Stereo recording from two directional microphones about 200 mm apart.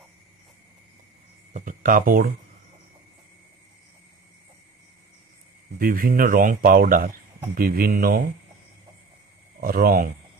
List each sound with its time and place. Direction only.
1.5 s speech: 40° right (ahead or behind)
5.8 s speech: 45° right (ahead or behind)
9.6 s speech: 45° right (ahead or behind)